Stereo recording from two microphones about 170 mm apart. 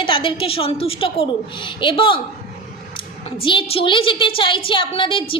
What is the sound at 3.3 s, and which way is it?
A woman's voice, 30° left (ahead or behind).